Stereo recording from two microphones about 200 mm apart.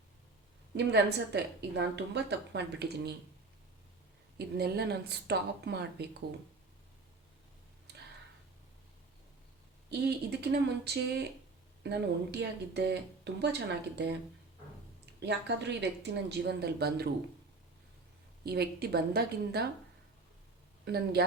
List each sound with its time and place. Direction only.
0.9 s speech: 60° right (ahead or behind)
4.4 s speech: 55° right (ahead or behind)
7.9 s a sound: 55° right (ahead or behind)
9.9 s speech: 55° right (ahead or behind)
15.2 s speech: 60° right (ahead or behind)
18.4 s a woman's voice: 55° right (ahead or behind)
20.8 s a woman's voice: 55° right (ahead or behind)